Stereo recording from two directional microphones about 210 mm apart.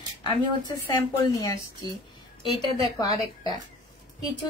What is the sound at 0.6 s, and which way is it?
A woman's voice, 15° left (ahead or behind).